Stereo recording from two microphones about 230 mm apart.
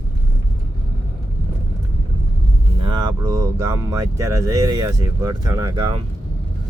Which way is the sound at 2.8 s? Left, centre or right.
Centre.